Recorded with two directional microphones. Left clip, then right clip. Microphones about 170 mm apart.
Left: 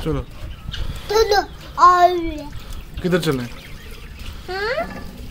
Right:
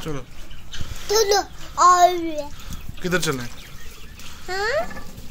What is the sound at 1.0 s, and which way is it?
A child's voice, 75° right (ahead or behind).